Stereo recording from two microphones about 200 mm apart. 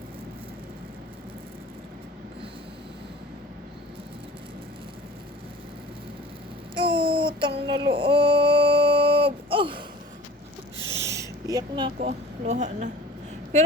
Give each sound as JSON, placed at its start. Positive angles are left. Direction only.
{"t": 6.7, "sound": "child singing", "side_deg": -25}
{"t": 10.9, "sound": "a sound", "side_deg": -15}
{"t": 11.9, "sound": "a woman's voice", "side_deg": -35}